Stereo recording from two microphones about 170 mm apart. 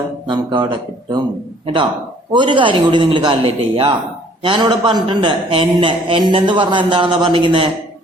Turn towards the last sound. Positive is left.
turn(degrees=-30)  # may be behind; listen again after turning